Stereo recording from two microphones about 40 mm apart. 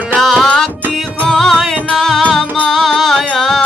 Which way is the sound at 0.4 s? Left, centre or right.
Centre.